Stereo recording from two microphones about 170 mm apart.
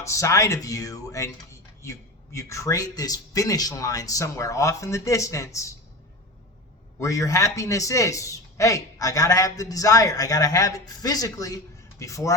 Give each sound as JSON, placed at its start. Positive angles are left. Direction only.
{"t": 0.0, "sound": "a man's voice", "side_deg": 20}
{"t": 7.0, "sound": "a man's voice", "side_deg": 20}